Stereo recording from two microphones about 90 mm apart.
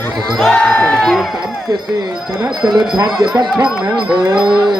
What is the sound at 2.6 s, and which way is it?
Speech, 50° right (ahead or behind).